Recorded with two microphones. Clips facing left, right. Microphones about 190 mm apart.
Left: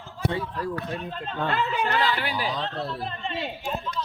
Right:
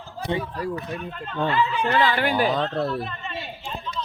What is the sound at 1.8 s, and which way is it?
Speech, 50° right (ahead or behind).